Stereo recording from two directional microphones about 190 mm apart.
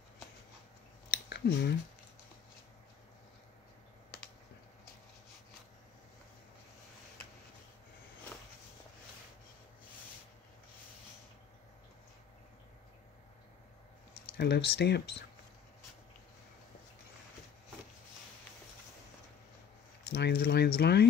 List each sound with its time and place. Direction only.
1.3 s speech: 60° left (ahead or behind)
14.2 s speech: 60° left (ahead or behind)
20.1 s speech: 60° left (ahead or behind)